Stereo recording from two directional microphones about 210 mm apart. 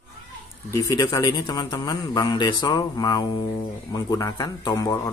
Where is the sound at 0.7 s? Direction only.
15° left (ahead or behind).